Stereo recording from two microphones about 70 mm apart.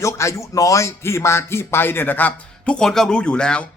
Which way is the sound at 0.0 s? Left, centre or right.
Left.